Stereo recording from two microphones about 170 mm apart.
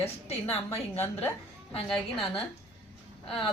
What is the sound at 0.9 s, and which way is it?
Speech, 10° left (ahead or behind).